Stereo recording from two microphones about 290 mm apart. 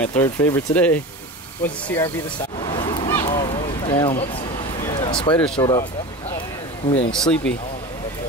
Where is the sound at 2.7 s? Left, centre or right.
Centre.